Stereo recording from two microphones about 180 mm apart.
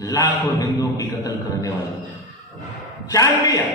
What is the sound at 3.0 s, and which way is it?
Speech, 20° left (ahead or behind).